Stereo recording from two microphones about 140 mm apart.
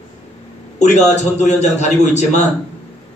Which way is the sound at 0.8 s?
55° left (ahead or behind).